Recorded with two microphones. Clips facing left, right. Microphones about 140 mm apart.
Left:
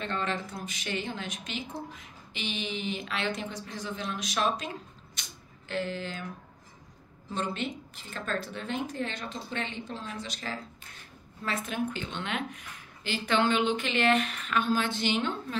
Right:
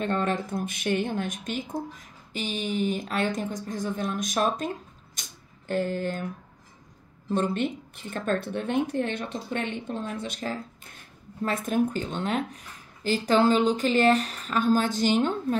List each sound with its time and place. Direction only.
0.0 s speech: 50° right (ahead or behind)
7.2 s speech: 50° right (ahead or behind)